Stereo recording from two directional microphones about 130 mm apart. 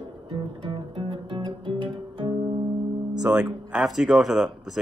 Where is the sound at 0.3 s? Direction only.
40° right (ahead or behind).